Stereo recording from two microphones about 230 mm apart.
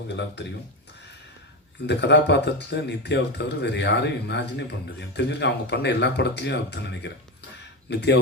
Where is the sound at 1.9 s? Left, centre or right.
Left.